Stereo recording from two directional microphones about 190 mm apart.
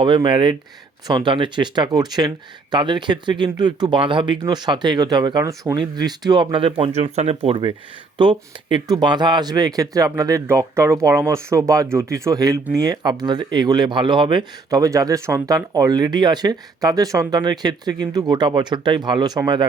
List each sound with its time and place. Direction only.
0.0 s speech: 25° right (ahead or behind)